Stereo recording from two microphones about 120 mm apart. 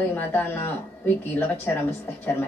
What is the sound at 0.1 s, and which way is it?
Speech, 15° left (ahead or behind).